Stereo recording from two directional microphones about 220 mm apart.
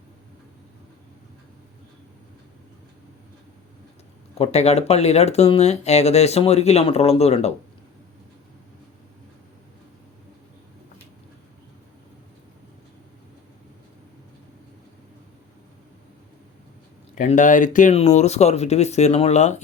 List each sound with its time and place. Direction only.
4.4 s speech: 30° left (ahead or behind)
17.2 s speech: 35° left (ahead or behind)